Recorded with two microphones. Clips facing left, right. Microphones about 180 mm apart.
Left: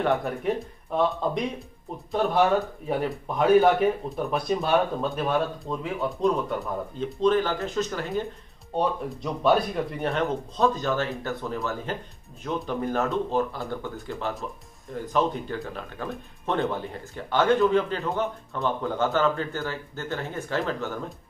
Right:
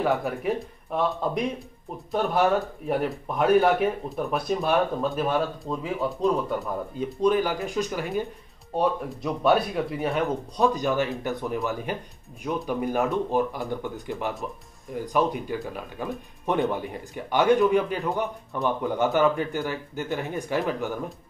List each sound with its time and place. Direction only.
0.0 s speech: 5° right (ahead or behind)